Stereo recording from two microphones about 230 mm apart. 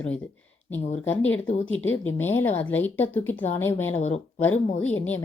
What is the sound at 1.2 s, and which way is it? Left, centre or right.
Speech, left.